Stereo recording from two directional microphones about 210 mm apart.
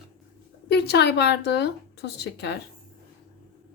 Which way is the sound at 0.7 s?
50° left (ahead or behind).